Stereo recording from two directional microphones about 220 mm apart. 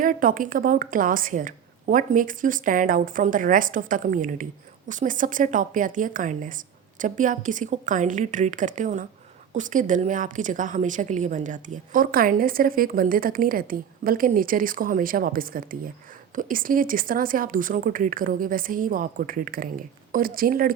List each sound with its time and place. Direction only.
0.0 s a woman's voice: 40° right (ahead or behind)